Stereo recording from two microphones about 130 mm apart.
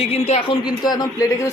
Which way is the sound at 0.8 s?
30° left (ahead or behind).